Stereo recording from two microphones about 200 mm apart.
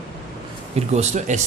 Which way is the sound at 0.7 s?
35° right (ahead or behind).